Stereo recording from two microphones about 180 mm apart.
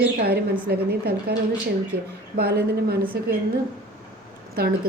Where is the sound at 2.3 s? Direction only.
60° right (ahead or behind).